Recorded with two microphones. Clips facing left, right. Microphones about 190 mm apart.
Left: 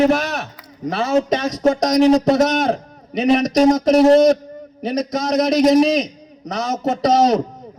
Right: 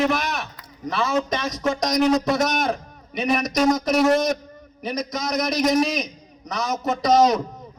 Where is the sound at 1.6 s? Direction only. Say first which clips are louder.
Left 6 dB; 35° left (ahead or behind).